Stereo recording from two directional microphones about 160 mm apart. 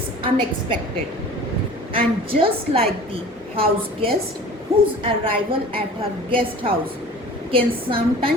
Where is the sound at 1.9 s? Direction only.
35° right (ahead or behind).